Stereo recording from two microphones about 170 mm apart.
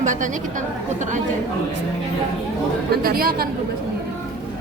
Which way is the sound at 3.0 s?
60° right (ahead or behind).